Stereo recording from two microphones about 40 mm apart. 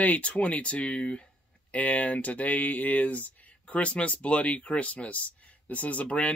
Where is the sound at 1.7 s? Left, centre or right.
Left.